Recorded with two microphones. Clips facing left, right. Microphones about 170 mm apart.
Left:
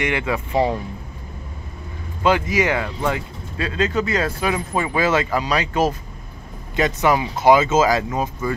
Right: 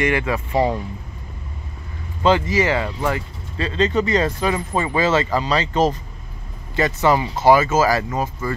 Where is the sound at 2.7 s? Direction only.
10° right (ahead or behind).